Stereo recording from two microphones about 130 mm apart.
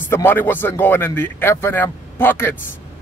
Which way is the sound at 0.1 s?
15° left (ahead or behind).